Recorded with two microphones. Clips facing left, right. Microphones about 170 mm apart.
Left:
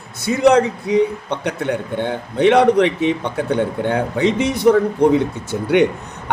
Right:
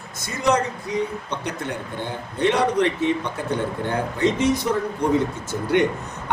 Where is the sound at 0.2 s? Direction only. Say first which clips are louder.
Left 8 dB; 65° left (ahead or behind).